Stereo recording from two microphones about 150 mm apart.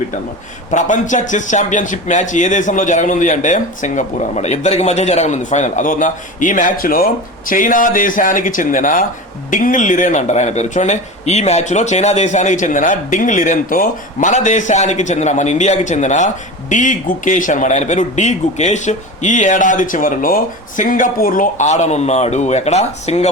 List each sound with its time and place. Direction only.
0.7 s speech: 55° left (ahead or behind)